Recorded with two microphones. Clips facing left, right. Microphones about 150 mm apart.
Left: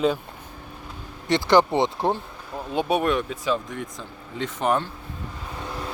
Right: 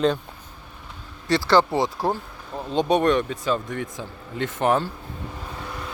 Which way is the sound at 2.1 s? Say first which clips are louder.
Left 1 dB; centre (ahead or behind).